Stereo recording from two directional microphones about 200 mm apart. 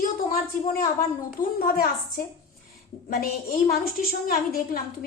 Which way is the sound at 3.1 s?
45° left (ahead or behind).